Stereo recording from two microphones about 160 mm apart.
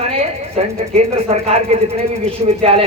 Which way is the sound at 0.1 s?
40° right (ahead or behind).